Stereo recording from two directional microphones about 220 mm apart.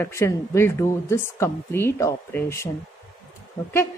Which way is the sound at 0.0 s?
10° left (ahead or behind).